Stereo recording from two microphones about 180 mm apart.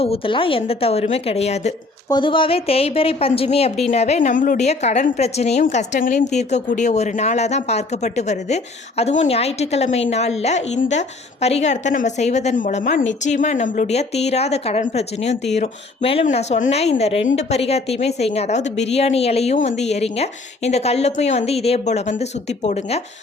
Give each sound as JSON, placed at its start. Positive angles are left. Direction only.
{"t": 0.0, "sound": "a woman's voice", "side_deg": 30}
{"t": 2.0, "sound": "a woman's voice", "side_deg": 25}